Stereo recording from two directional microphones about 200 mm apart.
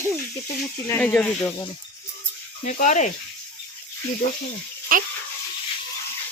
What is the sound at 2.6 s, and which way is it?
Speech, 40° left (ahead or behind).